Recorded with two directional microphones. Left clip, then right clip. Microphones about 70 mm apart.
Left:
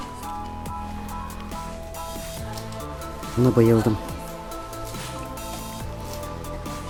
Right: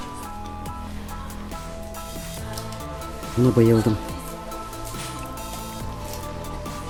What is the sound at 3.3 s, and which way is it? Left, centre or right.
Speech, centre.